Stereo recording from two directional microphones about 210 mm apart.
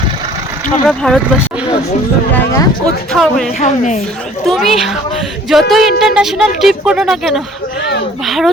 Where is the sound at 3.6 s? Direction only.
35° left (ahead or behind).